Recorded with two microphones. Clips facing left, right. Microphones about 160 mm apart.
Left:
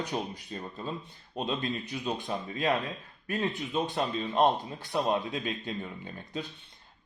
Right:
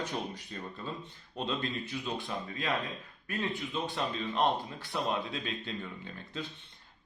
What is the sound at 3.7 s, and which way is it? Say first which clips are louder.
Speech: left 6 dB; 45° left (ahead or behind).